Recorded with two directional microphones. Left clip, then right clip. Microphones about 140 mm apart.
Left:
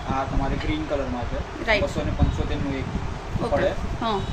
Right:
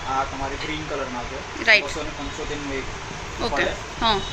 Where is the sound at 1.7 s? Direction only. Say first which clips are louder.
Right 6 dB; 20° left (ahead or behind).